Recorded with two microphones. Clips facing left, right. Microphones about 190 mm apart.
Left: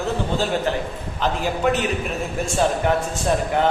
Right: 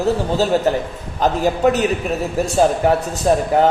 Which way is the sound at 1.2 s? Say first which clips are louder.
Right 6 dB; 40° right (ahead or behind).